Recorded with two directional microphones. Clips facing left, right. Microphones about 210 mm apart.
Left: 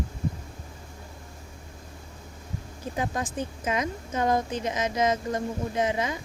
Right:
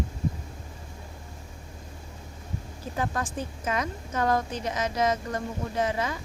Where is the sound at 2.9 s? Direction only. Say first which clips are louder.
Left 1 dB; 20° left (ahead or behind).